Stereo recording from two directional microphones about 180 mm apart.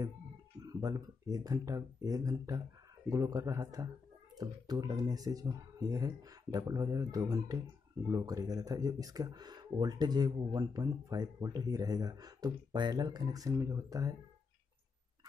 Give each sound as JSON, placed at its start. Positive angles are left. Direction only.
{"t": 0.6, "sound": "speech", "side_deg": -20}